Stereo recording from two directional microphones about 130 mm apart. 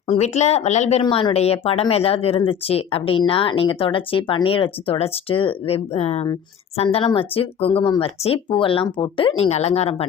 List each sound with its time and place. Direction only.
0.1 s speech: 55° left (ahead or behind)